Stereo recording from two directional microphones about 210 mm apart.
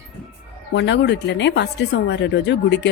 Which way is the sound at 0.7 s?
55° left (ahead or behind).